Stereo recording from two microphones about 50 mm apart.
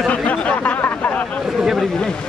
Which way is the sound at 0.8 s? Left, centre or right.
Left.